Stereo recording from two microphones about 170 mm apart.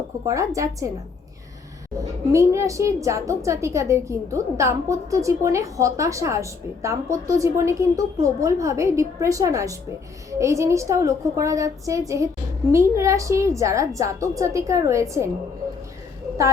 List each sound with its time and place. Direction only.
0.3 s speech: 20° right (ahead or behind)
2.3 s a woman's voice: 15° right (ahead or behind)